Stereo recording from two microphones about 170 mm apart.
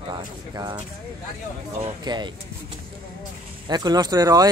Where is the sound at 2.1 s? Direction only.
25° right (ahead or behind).